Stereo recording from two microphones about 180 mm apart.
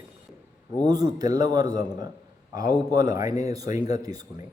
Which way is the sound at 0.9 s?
20° right (ahead or behind).